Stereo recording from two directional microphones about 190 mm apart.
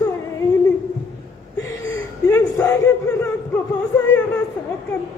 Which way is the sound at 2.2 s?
20° left (ahead or behind).